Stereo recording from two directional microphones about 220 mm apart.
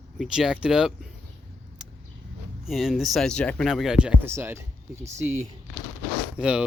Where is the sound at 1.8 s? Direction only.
5° right (ahead or behind).